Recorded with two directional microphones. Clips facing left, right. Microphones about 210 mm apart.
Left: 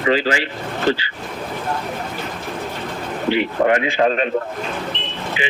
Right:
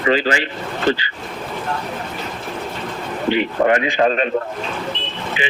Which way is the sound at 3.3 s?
10° left (ahead or behind).